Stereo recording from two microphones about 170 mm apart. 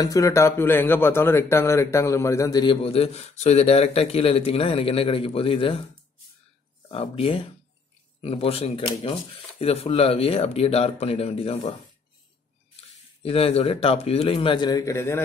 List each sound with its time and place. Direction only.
0.0 s a man's voice: 20° left (ahead or behind)
6.9 s a man's voice: 35° left (ahead or behind)
13.2 s a man's voice: 35° left (ahead or behind); by 15.2 s 15° left (ahead or behind)